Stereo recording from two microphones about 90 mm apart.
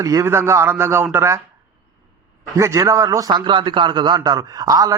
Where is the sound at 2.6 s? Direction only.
35° right (ahead or behind).